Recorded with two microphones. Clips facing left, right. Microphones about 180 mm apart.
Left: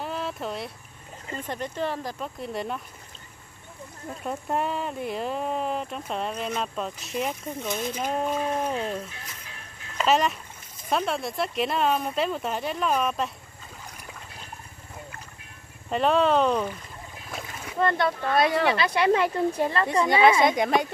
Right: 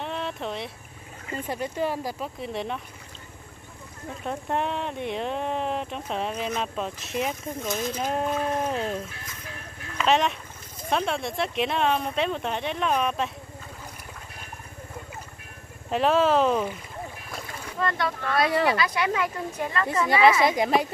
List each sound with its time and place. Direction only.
0.0 s a sound: 5° left (ahead or behind)
1.3 s speech: 10° right (ahead or behind)
4.2 s speech: 5° left (ahead or behind)
10.0 s speech: centre (ahead or behind)
15.9 s speech: centre (ahead or behind)
17.3 s boat: 5° left (ahead or behind)
17.7 s speech: 25° left (ahead or behind)
20.2 s speech: 5° right (ahead or behind)